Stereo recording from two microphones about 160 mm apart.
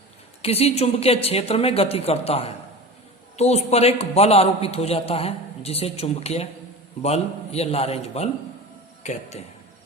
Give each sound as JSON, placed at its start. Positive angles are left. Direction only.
{"t": 0.4, "sound": "a man's voice", "side_deg": 40}